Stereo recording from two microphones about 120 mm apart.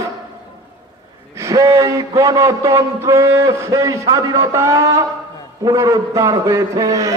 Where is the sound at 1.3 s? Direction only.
25° right (ahead or behind).